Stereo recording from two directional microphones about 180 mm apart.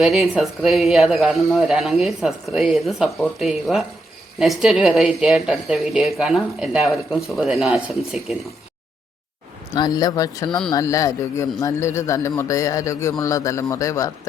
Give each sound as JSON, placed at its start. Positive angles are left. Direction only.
{"t": 0.0, "sound": "a woman's voice", "side_deg": 0}
{"t": 9.7, "sound": "a man's voice", "side_deg": 20}